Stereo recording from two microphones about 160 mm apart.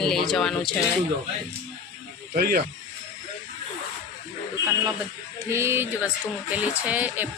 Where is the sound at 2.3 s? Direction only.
65° right (ahead or behind).